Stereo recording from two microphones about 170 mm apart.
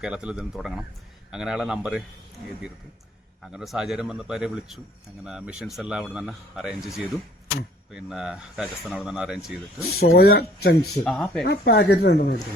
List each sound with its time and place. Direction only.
0.0 s speech: 5° right (ahead or behind)
3.5 s speech: centre (ahead or behind)
9.9 s speech: 65° left (ahead or behind)
11.0 s speech: centre (ahead or behind)
11.4 s speech: 70° left (ahead or behind)